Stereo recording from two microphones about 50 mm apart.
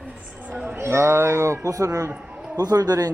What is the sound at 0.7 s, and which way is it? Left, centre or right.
A man's voice, right.